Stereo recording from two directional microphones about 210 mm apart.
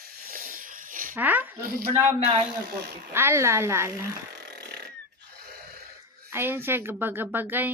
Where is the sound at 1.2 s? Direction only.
10° right (ahead or behind).